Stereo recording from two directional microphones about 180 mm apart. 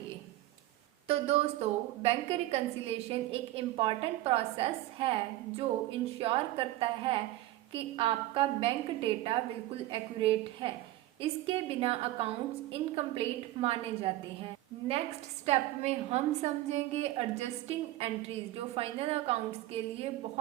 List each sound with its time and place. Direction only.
1.0 s a woman's voice: 35° right (ahead or behind)
6.1 s a woman's voice: 30° right (ahead or behind)
15.4 s a woman's voice: 35° right (ahead or behind)